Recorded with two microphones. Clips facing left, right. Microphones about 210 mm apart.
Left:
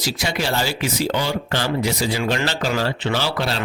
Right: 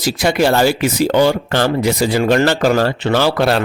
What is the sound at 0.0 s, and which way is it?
Speech, 55° right (ahead or behind).